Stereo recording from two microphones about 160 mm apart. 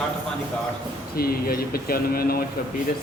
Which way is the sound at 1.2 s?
70° left (ahead or behind).